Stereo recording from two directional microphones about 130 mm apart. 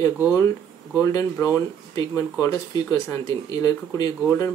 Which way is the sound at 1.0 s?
25° left (ahead or behind).